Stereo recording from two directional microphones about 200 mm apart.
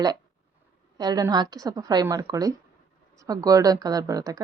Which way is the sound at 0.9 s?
20° right (ahead or behind).